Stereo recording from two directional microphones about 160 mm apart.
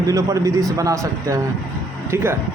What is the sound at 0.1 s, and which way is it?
Speech, 20° right (ahead or behind).